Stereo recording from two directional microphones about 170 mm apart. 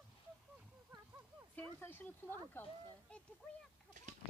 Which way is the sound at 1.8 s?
10° left (ahead or behind).